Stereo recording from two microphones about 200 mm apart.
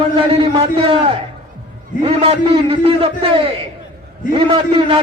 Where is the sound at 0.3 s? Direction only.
25° right (ahead or behind).